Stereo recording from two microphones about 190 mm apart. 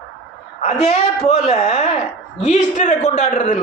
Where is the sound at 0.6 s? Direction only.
35° left (ahead or behind).